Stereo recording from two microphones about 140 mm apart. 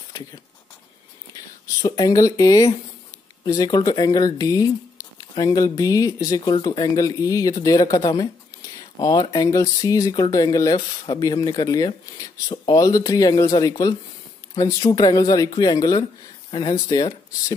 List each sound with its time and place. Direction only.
1.8 s speech: 25° left (ahead or behind)